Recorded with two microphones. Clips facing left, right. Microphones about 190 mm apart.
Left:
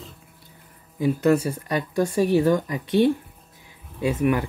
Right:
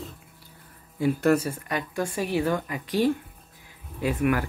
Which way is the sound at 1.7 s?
35° left (ahead or behind).